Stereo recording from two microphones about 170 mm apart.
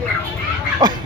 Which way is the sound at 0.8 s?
25° right (ahead or behind).